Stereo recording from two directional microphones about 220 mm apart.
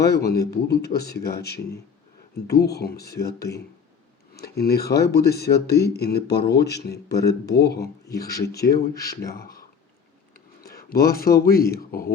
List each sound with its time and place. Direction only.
0.0 s speech: 45° left (ahead or behind)